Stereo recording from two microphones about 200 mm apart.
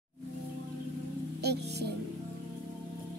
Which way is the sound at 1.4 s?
55° right (ahead or behind).